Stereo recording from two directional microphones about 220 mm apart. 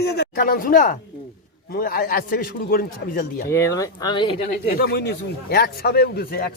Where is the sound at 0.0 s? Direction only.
50° left (ahead or behind).